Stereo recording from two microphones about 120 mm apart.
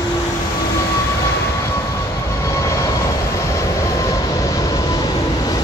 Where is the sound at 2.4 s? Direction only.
25° left (ahead or behind).